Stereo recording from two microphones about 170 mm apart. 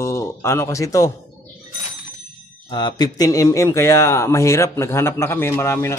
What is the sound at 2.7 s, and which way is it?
Speech, 25° left (ahead or behind).